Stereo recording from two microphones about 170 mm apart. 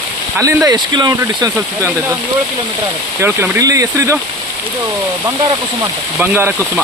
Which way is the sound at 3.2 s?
10° right (ahead or behind).